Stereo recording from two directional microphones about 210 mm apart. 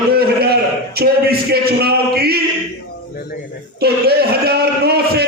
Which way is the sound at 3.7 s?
50° right (ahead or behind).